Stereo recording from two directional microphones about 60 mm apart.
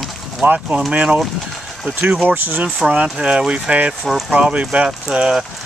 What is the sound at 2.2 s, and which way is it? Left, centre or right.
Speech, right.